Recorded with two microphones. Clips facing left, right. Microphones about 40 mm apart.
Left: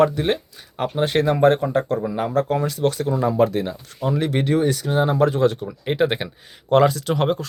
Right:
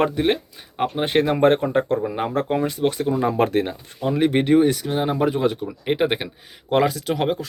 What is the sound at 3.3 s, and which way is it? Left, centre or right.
Speech, right.